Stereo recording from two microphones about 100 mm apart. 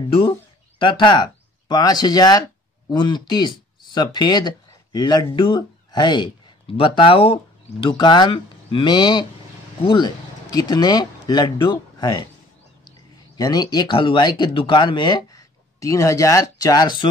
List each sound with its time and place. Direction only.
0.7 s speech: 55° left (ahead or behind)
6.8 s speech: 65° left (ahead or behind)
7.8 s speech: 45° left (ahead or behind)
13.4 s speech: 45° left (ahead or behind)
15.8 s speech: 35° left (ahead or behind)